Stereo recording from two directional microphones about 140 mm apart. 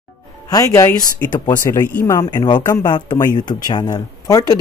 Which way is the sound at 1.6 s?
15° left (ahead or behind).